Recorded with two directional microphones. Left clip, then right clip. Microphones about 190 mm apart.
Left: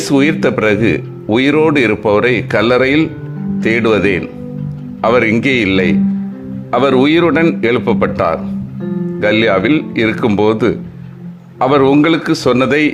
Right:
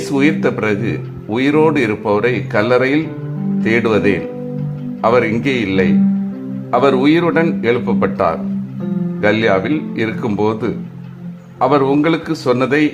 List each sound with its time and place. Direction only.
0.0 s speech: 20° left (ahead or behind)